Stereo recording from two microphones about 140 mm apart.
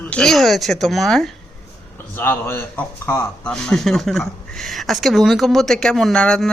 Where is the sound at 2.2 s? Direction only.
15° left (ahead or behind).